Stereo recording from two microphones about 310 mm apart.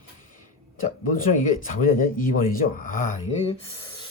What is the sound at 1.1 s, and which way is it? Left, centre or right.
Speech, left.